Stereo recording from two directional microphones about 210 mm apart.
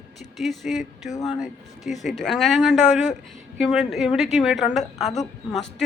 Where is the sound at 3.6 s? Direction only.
Centre (ahead or behind).